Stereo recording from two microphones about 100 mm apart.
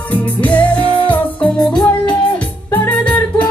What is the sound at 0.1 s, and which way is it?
Music, 15° left (ahead or behind).